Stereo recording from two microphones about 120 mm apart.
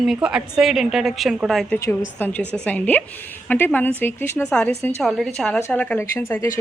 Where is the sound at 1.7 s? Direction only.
25° left (ahead or behind).